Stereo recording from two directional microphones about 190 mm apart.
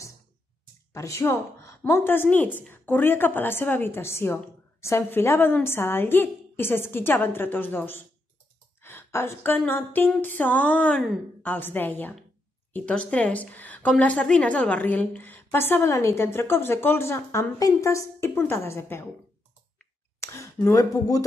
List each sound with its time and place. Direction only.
0.9 s a woman's voice: 15° left (ahead or behind)
20.2 s speech: 15° left (ahead or behind)